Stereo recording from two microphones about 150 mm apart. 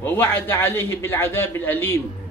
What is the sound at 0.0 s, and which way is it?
A man's voice, 15° left (ahead or behind).